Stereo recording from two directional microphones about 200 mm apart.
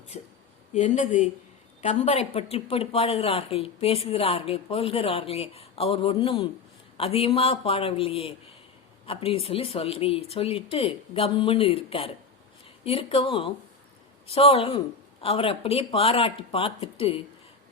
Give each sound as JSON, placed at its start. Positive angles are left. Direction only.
{"t": 0.1, "sound": "speech", "side_deg": 35}